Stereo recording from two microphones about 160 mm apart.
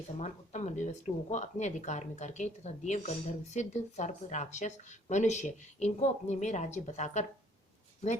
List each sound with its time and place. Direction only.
0.2 s speech: 45° left (ahead or behind)